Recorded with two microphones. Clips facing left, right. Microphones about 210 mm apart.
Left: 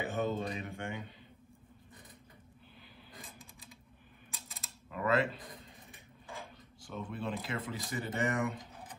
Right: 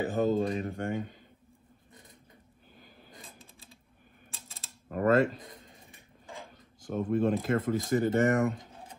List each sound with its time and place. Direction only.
0.1 s speech: 35° right (ahead or behind)
3.3 s typewriter: 25° right (ahead or behind)
4.8 s speech: 45° right (ahead or behind)
6.8 s speech: 50° right (ahead or behind)